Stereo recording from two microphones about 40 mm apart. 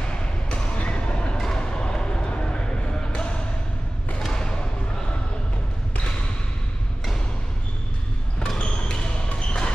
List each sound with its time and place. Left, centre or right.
0.5 s a sound: left
4.2 s thump: centre
8.4 s basketball bounce: left